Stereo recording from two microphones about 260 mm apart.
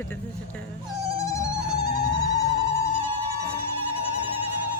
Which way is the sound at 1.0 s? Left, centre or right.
Centre.